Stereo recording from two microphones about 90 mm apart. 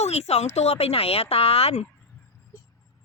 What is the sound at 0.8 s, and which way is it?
Speech, 90° left.